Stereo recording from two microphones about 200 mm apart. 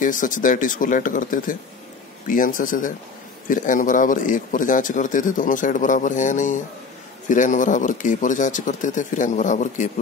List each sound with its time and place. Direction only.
0.0 s a man's voice: 40° left (ahead or behind)